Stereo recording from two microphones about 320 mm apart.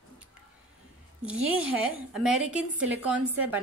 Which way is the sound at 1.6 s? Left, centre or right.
Centre.